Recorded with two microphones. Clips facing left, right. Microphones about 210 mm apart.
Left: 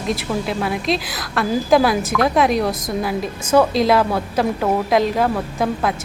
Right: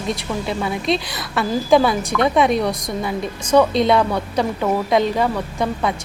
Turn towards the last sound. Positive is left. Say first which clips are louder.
# left 1 dB
turn(degrees=0)  # may be behind; listen again after turning